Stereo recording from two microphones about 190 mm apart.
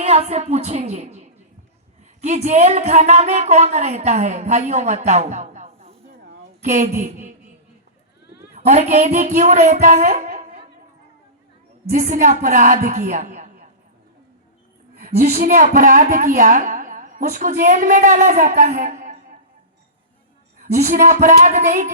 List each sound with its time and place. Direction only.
0.0 s a woman's voice: 35° right (ahead or behind)
8.5 s a woman's voice: 40° right (ahead or behind)
9.7 s music: 45° right (ahead or behind)
11.9 s speech: 45° right (ahead or behind)
15.2 s speech: 40° right (ahead or behind)
20.6 s speech: 40° right (ahead or behind)